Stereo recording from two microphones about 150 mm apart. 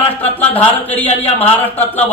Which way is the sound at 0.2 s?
10° left (ahead or behind).